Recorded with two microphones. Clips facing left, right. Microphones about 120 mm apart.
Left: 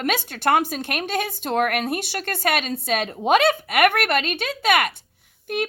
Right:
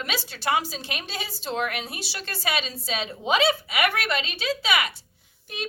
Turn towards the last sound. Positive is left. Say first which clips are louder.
# left 10 dB
turn(degrees=55)  # may be behind; listen again after turning